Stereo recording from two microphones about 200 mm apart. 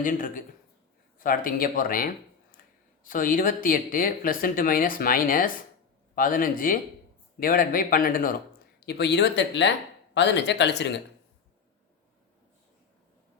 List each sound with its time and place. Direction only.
0.0 s a man's voice: 40° left (ahead or behind)
8.9 s speech: 55° left (ahead or behind)